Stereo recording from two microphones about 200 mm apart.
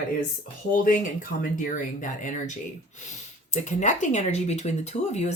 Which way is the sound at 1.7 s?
40° left (ahead or behind).